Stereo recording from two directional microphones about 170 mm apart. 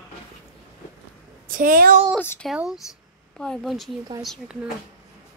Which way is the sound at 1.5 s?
55° right (ahead or behind).